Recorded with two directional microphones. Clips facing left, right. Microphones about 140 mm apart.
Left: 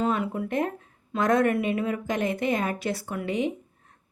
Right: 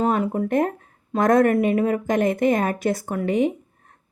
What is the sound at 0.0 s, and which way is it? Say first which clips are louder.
A woman's voice: right 5 dB; 40° right (ahead or behind).